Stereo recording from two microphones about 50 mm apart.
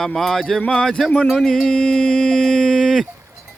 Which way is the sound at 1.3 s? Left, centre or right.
Centre.